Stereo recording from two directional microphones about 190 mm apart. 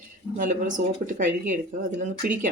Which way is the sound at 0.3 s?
45° right (ahead or behind).